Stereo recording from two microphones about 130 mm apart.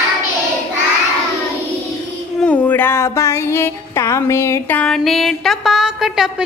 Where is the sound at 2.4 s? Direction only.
10° left (ahead or behind); by 6.4 s 5° right (ahead or behind).